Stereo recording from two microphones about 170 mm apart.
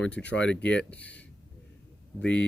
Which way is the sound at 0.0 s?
5° left (ahead or behind).